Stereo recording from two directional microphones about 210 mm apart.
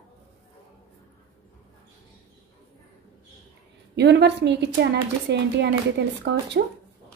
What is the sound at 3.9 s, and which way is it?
A woman's voice, 55° right (ahead or behind).